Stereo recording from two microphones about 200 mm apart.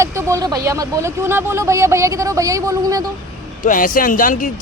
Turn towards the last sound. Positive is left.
turn(degrees=40)  # may be behind; listen again after turning